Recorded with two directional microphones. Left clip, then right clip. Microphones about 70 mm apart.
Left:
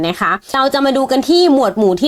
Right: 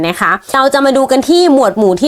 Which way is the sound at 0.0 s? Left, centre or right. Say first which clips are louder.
Right 3 dB; centre.